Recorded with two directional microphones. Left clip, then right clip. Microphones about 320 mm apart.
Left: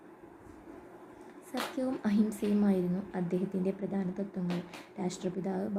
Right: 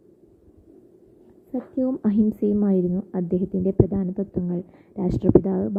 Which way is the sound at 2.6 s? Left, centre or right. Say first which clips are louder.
Right 9 dB; right.